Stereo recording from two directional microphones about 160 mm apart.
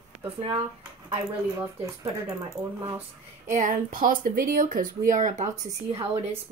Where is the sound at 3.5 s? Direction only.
55° right (ahead or behind).